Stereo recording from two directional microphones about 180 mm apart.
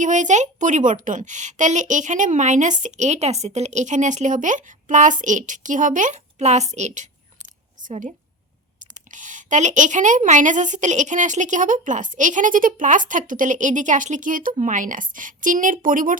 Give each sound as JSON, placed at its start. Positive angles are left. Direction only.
{"t": 0.0, "sound": "a woman's voice", "side_deg": -45}
{"t": 9.1, "sound": "a woman's voice", "side_deg": -45}